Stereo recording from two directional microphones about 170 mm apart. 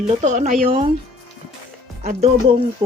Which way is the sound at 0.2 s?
45° right (ahead or behind).